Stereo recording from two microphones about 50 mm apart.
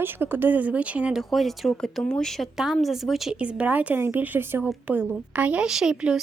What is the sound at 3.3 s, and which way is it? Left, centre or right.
Speech, right.